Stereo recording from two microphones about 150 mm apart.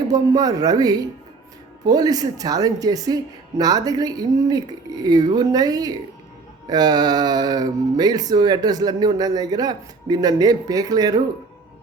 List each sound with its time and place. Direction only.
0.1 s speech: 25° right (ahead or behind)